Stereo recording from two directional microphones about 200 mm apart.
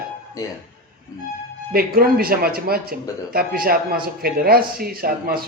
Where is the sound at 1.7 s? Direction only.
50° right (ahead or behind).